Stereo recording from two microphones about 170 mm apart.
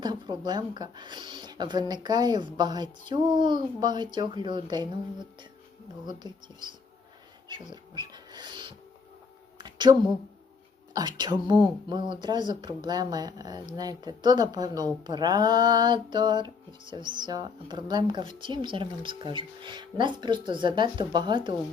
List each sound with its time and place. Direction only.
0.0 s speech: 25° right (ahead or behind)
9.6 s a sound: 25° right (ahead or behind)
10.9 s speech: 25° right (ahead or behind)